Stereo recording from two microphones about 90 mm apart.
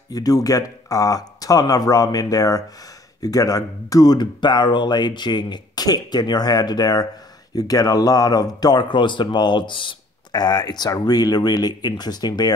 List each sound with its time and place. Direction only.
0.1 s speech: 45° left (ahead or behind)